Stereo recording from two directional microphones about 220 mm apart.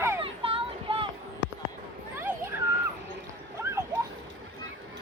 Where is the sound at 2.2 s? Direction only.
10° right (ahead or behind).